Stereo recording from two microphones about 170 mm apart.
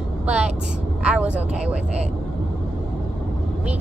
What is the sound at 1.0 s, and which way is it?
Speech, 5° right (ahead or behind).